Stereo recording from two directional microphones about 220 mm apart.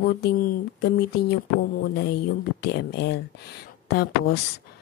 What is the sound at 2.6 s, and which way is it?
Speech, 50° left (ahead or behind).